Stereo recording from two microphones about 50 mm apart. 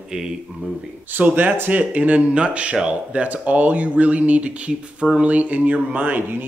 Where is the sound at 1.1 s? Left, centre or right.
Right.